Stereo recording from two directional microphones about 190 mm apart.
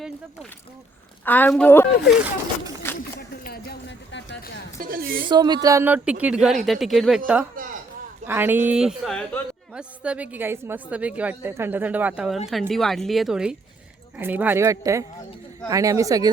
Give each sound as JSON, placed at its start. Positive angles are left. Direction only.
{"t": 1.2, "sound": "a woman's voice", "side_deg": 10}
{"t": 2.8, "sound": "a sound", "side_deg": 10}
{"t": 3.2, "sound": "a sound", "side_deg": 55}
{"t": 4.8, "sound": "speech", "side_deg": -50}
{"t": 5.3, "sound": "a man's voice", "side_deg": -20}
{"t": 7.6, "sound": "speech", "side_deg": -45}
{"t": 8.3, "sound": "a man's voice", "side_deg": -10}